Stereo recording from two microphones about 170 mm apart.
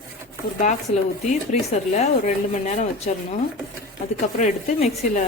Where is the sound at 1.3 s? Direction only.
45° left (ahead or behind).